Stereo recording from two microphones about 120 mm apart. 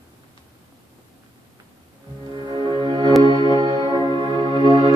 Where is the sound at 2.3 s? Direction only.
40° right (ahead or behind).